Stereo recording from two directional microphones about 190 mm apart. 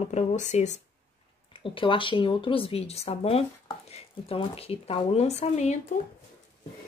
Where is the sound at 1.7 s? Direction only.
25° left (ahead or behind).